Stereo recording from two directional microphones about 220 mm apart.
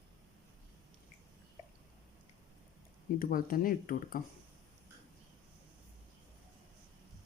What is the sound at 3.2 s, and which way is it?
Speech, 40° left (ahead or behind).